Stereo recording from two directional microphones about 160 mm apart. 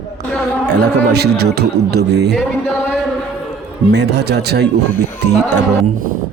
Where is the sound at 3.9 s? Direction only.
90° right.